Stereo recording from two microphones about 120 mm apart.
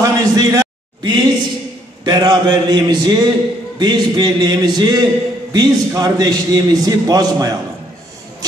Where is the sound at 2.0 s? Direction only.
40° right (ahead or behind).